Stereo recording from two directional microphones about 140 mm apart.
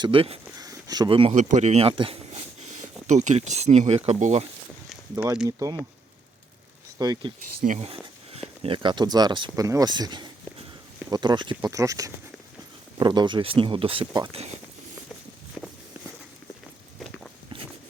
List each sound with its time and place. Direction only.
0.0 s speech: 40° right (ahead or behind)
0.5 s a sound: 25° right (ahead or behind)
1.3 s a sound: 55° right (ahead or behind)
3.1 s speech: 55° right (ahead or behind)
5.1 s speech: 25° right (ahead or behind)
7.0 s speech: 30° right (ahead or behind)
7.3 s speech: 75° right (ahead or behind)
7.8 s speech: 45° right (ahead or behind)
9.6 s a sound: 25° right (ahead or behind)
11.1 s speech: 30° right (ahead or behind)
14.3 s speech: 50° right (ahead or behind)
15.6 s walk: 5° left (ahead or behind)